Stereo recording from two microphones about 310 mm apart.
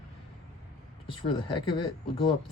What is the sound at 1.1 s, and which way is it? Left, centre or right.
Speech, centre.